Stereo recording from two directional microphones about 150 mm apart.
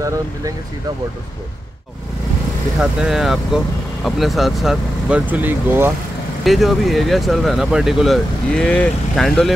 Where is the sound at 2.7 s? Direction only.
Centre (ahead or behind).